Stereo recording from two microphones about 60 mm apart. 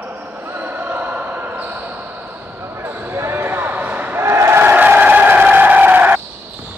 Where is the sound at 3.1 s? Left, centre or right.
Right.